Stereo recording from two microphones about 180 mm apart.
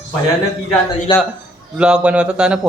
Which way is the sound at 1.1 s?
25° left (ahead or behind).